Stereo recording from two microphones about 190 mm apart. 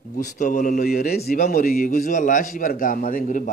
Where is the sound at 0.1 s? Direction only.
45° left (ahead or behind).